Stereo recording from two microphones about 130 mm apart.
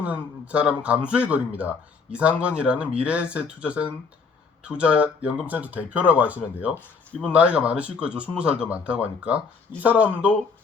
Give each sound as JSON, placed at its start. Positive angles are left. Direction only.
{"t": 0.0, "sound": "speech", "side_deg": -10}